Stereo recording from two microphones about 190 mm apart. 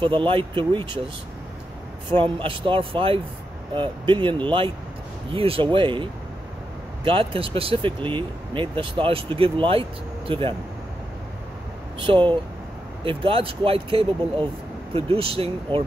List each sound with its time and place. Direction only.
0.0 s speech: 25° right (ahead or behind)
7.1 s speech: 30° right (ahead or behind)
12.0 s speech: 25° right (ahead or behind)